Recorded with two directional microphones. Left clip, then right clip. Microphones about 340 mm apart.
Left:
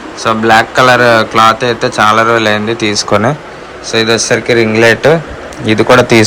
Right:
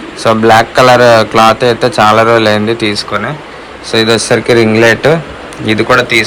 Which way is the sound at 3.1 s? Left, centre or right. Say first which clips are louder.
Left 5 dB; centre.